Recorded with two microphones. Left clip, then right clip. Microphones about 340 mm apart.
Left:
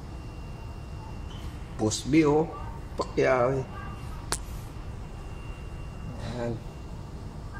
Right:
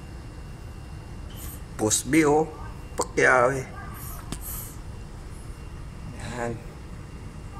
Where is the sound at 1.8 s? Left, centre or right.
Right.